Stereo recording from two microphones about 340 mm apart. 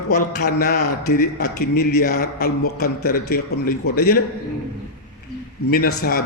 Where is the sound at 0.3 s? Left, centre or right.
Left.